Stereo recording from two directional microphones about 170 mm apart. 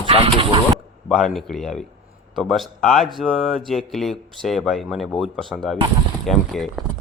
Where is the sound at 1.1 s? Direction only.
Centre (ahead or behind).